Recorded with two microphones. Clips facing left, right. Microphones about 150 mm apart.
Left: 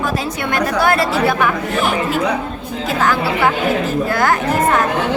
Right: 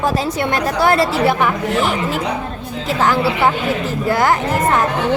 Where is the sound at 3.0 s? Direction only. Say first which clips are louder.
Right 1 dB; 25° right (ahead or behind).